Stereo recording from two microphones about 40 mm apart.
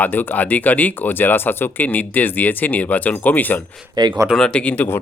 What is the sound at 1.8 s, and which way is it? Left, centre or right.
Speech, left.